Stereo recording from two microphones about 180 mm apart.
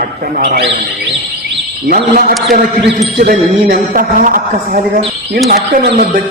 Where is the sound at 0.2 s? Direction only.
65° right (ahead or behind).